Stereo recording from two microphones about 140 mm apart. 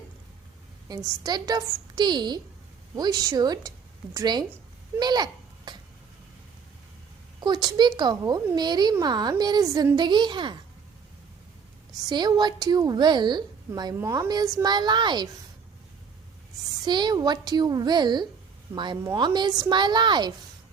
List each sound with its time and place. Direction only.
0.9 s a woman's voice: 30° right (ahead or behind)
7.4 s a woman's voice: 30° right (ahead or behind)
12.0 s a woman's voice: 30° right (ahead or behind)
16.8 s a woman's voice: 30° right (ahead or behind)